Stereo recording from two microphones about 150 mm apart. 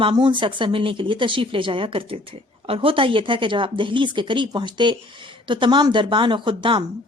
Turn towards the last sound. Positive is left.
turn(degrees=-35)  # may be behind; listen again after turning